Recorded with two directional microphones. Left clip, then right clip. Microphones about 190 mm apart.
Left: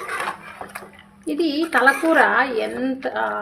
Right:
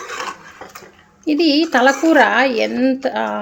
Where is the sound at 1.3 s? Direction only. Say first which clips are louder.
Right 6 dB; 40° right (ahead or behind).